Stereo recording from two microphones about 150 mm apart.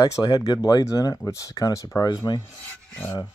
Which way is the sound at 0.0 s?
25° left (ahead or behind).